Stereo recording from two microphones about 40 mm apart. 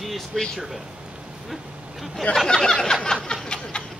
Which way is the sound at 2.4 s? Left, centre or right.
Centre.